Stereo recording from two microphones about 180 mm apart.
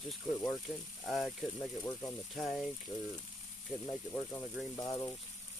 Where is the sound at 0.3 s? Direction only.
15° left (ahead or behind).